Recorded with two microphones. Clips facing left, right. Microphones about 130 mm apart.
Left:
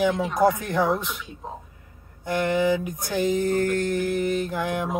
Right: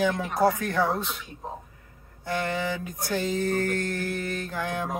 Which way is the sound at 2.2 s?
15° left (ahead or behind).